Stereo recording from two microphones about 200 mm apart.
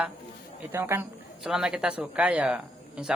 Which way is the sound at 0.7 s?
15° right (ahead or behind).